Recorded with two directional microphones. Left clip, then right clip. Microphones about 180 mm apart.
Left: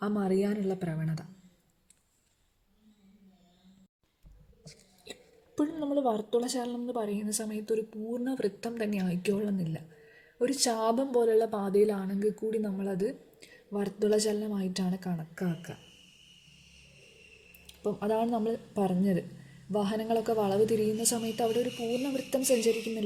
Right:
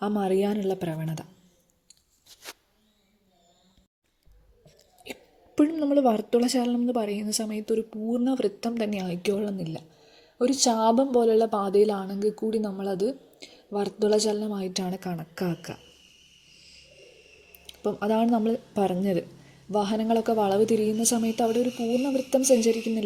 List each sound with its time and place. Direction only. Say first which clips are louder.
0.0 s a woman's voice: right 5 dB; 25° right (ahead or behind)
5.5 s a woman's voice: right 8 dB; 40° right (ahead or behind)
17.7 s a woman's voice: right 4 dB; 35° right (ahead or behind)